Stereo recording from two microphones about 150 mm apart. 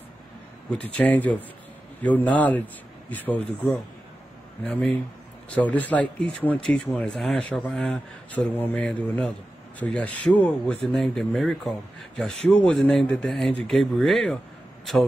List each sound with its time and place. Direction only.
0.9 s speech: 10° left (ahead or behind)